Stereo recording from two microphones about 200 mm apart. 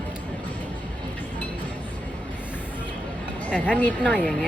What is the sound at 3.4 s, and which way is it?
Speech, 5° left (ahead or behind).